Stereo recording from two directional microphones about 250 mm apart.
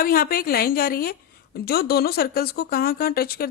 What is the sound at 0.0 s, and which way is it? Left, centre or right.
A woman's voice, left.